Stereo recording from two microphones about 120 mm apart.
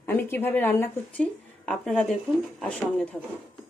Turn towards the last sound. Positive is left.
turn(degrees=10)  # may be behind; listen again after turning